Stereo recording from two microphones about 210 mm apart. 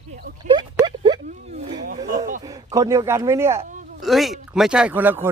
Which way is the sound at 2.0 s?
40° right (ahead or behind).